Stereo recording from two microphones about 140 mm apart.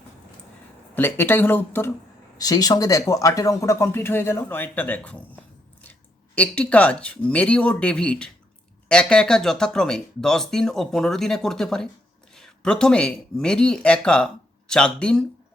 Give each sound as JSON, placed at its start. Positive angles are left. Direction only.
{"t": 0.9, "sound": "speech", "side_deg": 15}
{"t": 2.4, "sound": "speech", "side_deg": 25}